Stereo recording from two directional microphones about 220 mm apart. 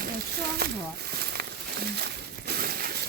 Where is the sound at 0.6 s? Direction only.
45° right (ahead or behind).